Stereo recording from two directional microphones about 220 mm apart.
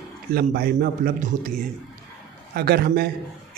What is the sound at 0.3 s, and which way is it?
Speech, 45° right (ahead or behind).